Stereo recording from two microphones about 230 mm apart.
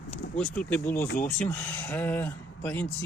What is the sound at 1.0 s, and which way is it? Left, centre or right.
Speech, left.